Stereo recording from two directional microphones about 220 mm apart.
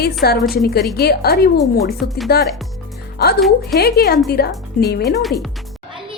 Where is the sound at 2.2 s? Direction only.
45° left (ahead or behind).